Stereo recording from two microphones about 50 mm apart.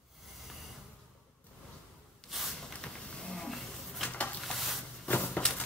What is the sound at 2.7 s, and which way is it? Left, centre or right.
Pigeon, centre.